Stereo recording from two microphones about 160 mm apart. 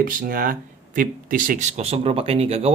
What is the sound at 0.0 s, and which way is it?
A man's voice, 60° right (ahead or behind).